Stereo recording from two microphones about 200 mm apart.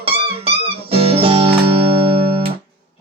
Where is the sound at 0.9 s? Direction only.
30° right (ahead or behind).